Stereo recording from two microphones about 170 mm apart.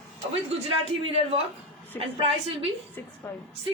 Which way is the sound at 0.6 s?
35° right (ahead or behind).